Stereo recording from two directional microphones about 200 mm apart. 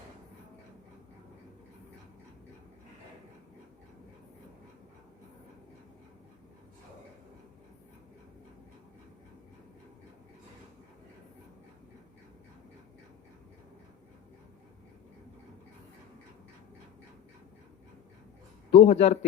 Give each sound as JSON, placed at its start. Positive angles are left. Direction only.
{"t": 18.7, "sound": "a man's voice", "side_deg": 30}